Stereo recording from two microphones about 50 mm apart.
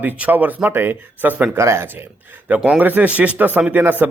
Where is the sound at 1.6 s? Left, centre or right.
Right.